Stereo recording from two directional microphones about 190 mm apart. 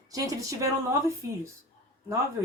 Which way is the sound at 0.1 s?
15° right (ahead or behind).